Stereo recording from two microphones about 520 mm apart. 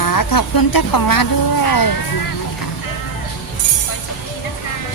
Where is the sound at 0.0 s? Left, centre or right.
Left.